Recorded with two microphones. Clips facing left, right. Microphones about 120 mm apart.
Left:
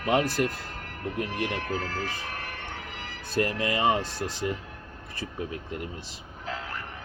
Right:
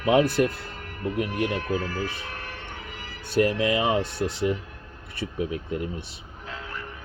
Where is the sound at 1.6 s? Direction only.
40° left (ahead or behind).